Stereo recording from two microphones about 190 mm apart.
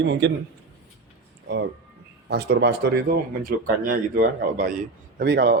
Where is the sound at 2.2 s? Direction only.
60° right (ahead or behind).